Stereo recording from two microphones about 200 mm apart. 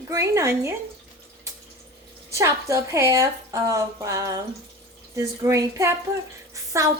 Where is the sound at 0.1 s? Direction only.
15° right (ahead or behind).